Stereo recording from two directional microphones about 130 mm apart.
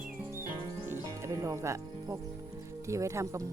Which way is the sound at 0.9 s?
20° right (ahead or behind).